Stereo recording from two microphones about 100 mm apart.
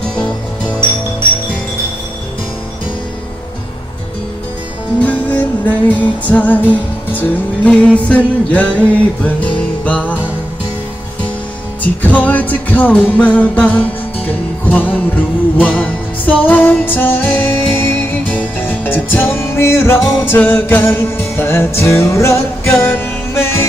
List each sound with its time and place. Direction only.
4.9 s music: 15° left (ahead or behind)
11.8 s music: 15° left (ahead or behind)